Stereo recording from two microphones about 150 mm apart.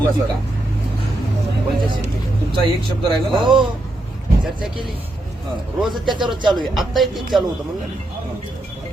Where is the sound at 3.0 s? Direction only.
35° right (ahead or behind).